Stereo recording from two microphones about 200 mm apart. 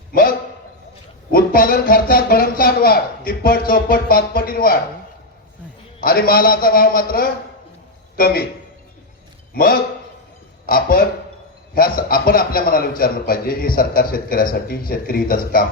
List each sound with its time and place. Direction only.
0.1 s a sound: 45° left (ahead or behind)
1.3 s a man's voice: 45° left (ahead or behind)
6.0 s a man's voice: 45° left (ahead or behind)
10.7 s a man's voice: 45° left (ahead or behind)